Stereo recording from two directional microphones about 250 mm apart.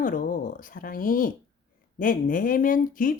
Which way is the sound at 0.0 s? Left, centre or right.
Left.